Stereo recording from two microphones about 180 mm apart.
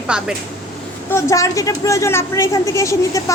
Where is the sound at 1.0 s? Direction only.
15° left (ahead or behind).